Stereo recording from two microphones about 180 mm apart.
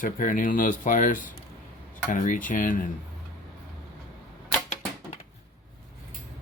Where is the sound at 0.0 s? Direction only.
50° left (ahead or behind).